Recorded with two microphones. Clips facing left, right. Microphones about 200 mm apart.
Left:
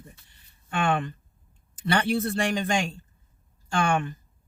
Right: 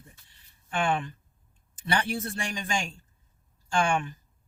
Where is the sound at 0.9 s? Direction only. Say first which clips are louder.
Left 2 dB; 60° left (ahead or behind).